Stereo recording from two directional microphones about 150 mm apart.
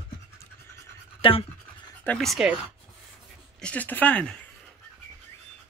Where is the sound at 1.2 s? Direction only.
35° left (ahead or behind).